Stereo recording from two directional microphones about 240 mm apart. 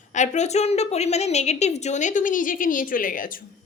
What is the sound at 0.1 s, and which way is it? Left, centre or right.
A woman's voice, left.